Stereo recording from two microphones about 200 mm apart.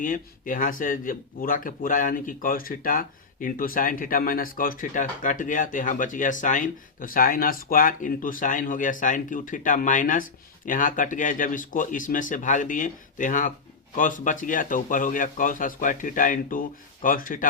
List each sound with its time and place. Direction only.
0.0 s speech: 40° left (ahead or behind)